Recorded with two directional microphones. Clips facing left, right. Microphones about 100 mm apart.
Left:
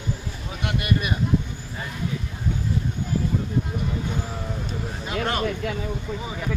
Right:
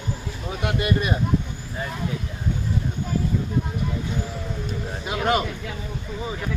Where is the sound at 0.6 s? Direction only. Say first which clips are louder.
Right 2 dB; 25° right (ahead or behind).